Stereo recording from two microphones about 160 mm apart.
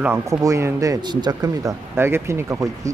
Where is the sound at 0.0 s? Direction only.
15° right (ahead or behind).